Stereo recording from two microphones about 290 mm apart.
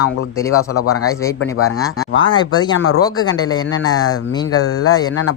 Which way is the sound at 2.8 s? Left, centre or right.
Left.